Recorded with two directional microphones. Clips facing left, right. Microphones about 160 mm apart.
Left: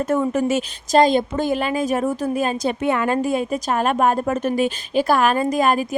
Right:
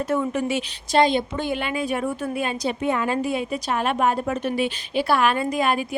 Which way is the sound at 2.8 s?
70° left (ahead or behind).